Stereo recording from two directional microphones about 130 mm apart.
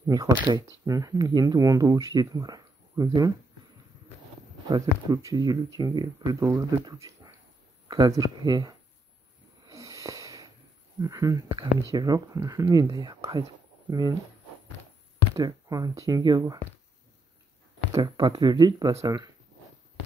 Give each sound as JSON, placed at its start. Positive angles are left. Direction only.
{"t": 0.0, "sound": "speech", "side_deg": -30}
{"t": 4.6, "sound": "speech", "side_deg": -30}
{"t": 9.7, "sound": "sniff", "side_deg": -25}
{"t": 11.0, "sound": "speech", "side_deg": -25}
{"t": 15.3, "sound": "speech", "side_deg": -30}
{"t": 17.9, "sound": "speech", "side_deg": -30}